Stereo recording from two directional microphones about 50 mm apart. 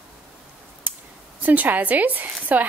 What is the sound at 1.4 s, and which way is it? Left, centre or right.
Speech, right.